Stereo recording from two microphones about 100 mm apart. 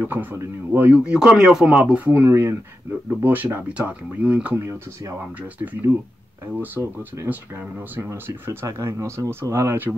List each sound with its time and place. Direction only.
0.0 s speech: 20° right (ahead or behind)
5.7 s speech: 15° right (ahead or behind)
8.1 s speech: 30° right (ahead or behind)